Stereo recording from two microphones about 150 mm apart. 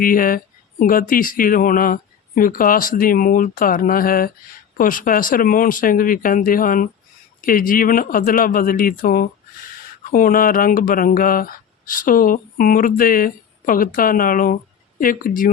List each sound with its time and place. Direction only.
0.0 s speech: 70° left (ahead or behind)